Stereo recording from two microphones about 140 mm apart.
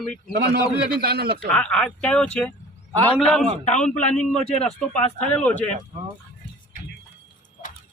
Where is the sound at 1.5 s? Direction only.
5° left (ahead or behind).